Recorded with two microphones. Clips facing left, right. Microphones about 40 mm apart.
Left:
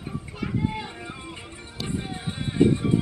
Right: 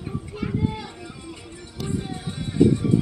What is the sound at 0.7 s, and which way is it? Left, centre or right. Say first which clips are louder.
Music: left 1 dB; left.